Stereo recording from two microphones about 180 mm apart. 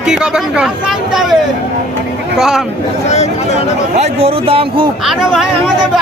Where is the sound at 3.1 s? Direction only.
40° left (ahead or behind).